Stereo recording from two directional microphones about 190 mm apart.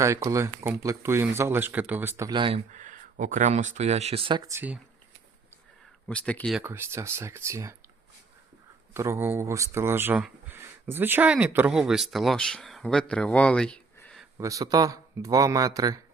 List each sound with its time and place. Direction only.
0.0 s speech: 15° right (ahead or behind)
2.7 s speech: 40° right (ahead or behind); by 4.8 s 10° right (ahead or behind)
6.1 s speech: 5° left (ahead or behind)
6.6 s speech: 10° right (ahead or behind)
8.9 s speech: 15° right (ahead or behind); by 14.3 s 5° left (ahead or behind)
14.3 s speech: 15° right (ahead or behind)